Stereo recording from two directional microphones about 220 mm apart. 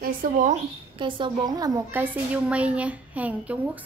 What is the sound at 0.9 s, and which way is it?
A woman's voice, 20° right (ahead or behind).